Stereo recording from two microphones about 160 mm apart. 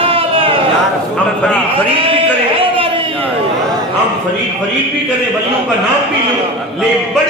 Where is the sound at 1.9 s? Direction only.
35° right (ahead or behind).